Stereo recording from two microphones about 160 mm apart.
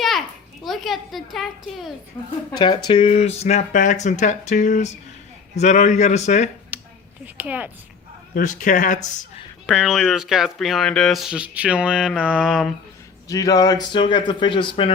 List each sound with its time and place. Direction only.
0.6 s speech: centre (ahead or behind)
2.2 s a man's voice: 25° left (ahead or behind); by 6.5 s 45° left (ahead or behind)
6.7 s a sound: 10° right (ahead or behind)
7.3 s speech: 10° right (ahead or behind)
8.4 s speech: 55° left (ahead or behind)
9.6 s speech: 5° right (ahead or behind)
13.2 s speech: 20° left (ahead or behind)